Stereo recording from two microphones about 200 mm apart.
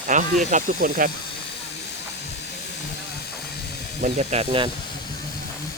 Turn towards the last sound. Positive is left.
turn(degrees=-30)  # may be behind; listen again after turning